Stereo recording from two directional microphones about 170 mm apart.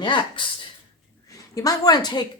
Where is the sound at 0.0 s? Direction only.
25° left (ahead or behind).